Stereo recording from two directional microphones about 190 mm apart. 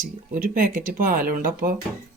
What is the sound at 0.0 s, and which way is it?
Speech, 45° right (ahead or behind).